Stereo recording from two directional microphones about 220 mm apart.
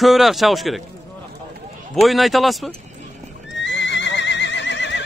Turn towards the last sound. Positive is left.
turn(degrees=55)  # may be behind; listen again after turning